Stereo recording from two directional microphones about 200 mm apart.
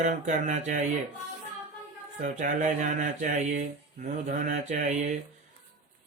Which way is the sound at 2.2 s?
40° right (ahead or behind).